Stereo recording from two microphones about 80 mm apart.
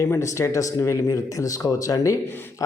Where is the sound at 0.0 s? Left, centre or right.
Left.